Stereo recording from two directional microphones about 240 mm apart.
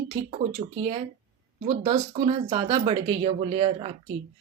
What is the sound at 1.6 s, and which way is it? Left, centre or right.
Speech, right.